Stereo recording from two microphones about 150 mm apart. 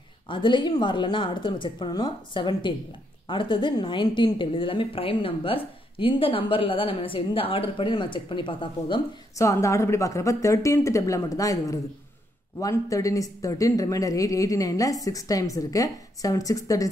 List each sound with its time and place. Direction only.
0.3 s a woman's voice: 30° left (ahead or behind)
9.4 s speech: 20° left (ahead or behind)